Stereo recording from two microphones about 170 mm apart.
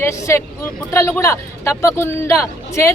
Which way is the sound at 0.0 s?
15° left (ahead or behind).